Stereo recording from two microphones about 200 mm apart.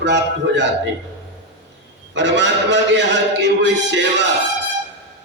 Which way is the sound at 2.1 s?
60° right (ahead or behind).